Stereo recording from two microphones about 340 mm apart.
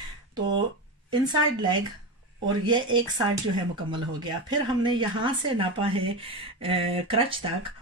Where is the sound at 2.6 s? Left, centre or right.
Centre.